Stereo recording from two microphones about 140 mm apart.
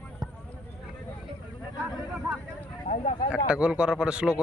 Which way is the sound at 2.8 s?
55° left (ahead or behind).